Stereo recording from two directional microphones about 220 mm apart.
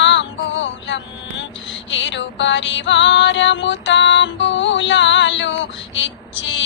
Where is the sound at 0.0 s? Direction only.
55° left (ahead or behind).